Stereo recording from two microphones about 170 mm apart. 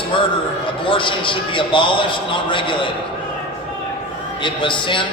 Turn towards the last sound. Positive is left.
turn(degrees=30)  # may be behind; listen again after turning